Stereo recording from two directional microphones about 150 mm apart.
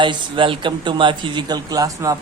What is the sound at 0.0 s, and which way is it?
Speech, 35° right (ahead or behind).